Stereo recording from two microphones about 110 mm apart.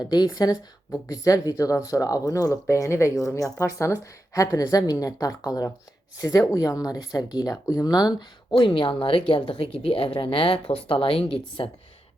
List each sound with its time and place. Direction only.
0.0 s a woman's voice: 35° left (ahead or behind); by 11.7 s 55° left (ahead or behind)